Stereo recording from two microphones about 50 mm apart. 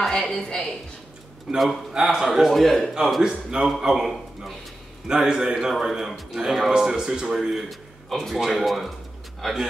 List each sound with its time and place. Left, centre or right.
0.0 s a woman's voice: centre
1.6 s a man's voice: centre
2.0 s a man's voice: centre
3.2 s a man's voice: centre
3.9 s a man's voice: centre